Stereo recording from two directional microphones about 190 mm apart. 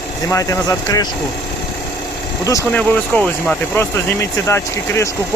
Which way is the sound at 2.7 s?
5° left (ahead or behind).